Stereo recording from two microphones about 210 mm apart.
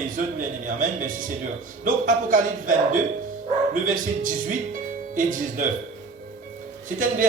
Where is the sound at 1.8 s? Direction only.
40° right (ahead or behind).